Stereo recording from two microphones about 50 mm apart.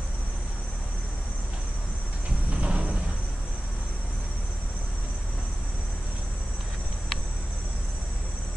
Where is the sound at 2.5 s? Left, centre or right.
Right.